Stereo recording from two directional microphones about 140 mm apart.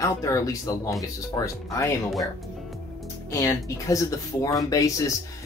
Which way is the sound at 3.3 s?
25° left (ahead or behind).